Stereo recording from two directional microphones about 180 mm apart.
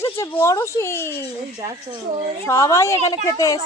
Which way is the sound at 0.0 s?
15° left (ahead or behind).